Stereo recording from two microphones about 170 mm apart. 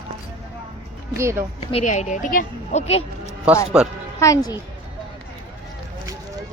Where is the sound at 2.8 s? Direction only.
35° left (ahead or behind).